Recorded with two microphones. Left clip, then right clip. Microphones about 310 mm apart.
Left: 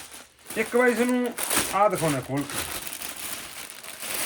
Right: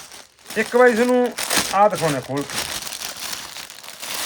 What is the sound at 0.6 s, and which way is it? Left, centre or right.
Speech, right.